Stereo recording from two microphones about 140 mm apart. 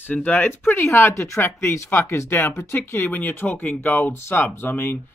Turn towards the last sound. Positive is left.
turn(degrees=15)  # may be behind; listen again after turning